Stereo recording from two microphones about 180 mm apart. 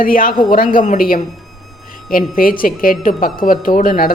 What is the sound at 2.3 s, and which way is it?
Speech, 50° left (ahead or behind).